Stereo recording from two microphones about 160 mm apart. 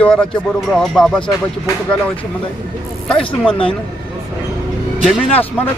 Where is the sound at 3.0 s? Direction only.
5° left (ahead or behind).